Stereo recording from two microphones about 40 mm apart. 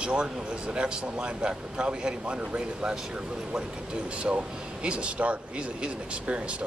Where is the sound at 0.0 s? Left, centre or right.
Right.